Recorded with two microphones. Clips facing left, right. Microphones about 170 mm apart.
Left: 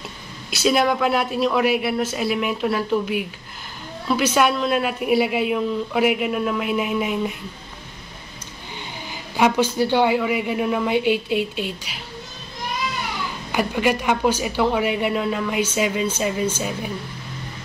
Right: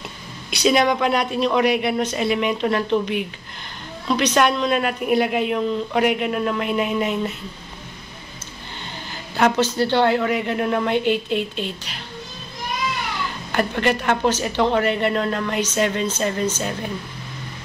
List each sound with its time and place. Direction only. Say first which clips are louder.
0.5 s a woman's voice: right 1 dB; 5° left (ahead or behind)
9.1 s a man's voice: even; 10° left (ahead or behind)
13.5 s a man's voice: even; 10° left (ahead or behind)